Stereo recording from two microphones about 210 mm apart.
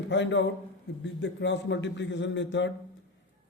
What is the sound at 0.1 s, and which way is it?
A man's voice, 60° left (ahead or behind).